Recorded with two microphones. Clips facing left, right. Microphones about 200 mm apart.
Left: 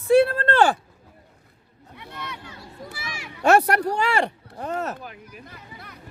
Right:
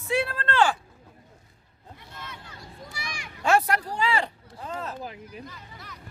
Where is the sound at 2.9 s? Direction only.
5° left (ahead or behind).